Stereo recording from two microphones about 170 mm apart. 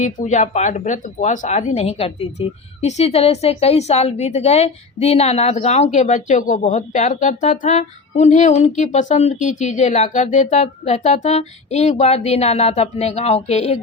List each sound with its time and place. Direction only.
0.0 s speech: 45° left (ahead or behind)